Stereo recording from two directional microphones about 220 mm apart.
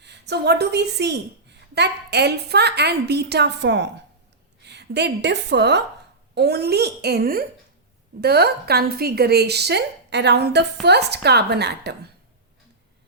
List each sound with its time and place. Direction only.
0.0 s a woman's voice: 50° right (ahead or behind)